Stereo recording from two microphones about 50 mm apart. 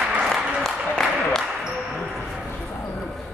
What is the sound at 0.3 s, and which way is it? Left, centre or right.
Applause, centre.